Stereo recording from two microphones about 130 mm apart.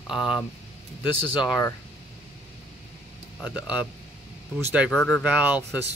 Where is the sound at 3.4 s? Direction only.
10° right (ahead or behind).